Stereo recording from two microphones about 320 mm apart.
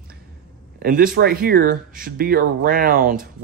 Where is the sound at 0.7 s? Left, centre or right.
Right.